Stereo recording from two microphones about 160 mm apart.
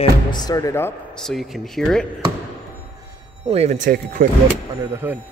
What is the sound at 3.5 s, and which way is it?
Speech, 45° right (ahead or behind).